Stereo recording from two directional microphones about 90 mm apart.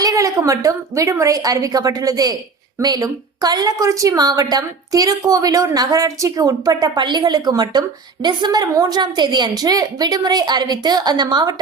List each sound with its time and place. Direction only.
0.0 s a woman's voice: 40° right (ahead or behind)